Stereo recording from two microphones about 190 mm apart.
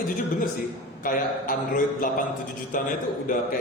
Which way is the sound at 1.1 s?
45° left (ahead or behind).